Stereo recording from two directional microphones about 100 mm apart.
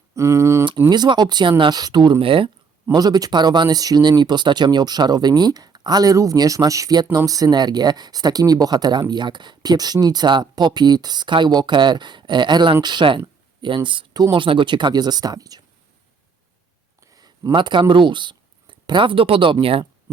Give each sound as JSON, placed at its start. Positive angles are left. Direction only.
{"t": 0.1, "sound": "speech", "side_deg": -30}
{"t": 0.9, "sound": "speech", "side_deg": -45}
{"t": 2.2, "sound": "speech", "side_deg": -60}
{"t": 2.9, "sound": "speech", "side_deg": -40}
{"t": 14.4, "sound": "speech", "side_deg": -55}
{"t": 17.0, "sound": "speech", "side_deg": -35}